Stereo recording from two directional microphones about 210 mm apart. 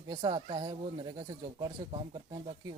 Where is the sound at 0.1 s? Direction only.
20° right (ahead or behind).